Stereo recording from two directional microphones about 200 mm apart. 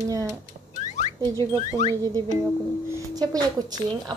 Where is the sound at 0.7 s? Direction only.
35° left (ahead or behind).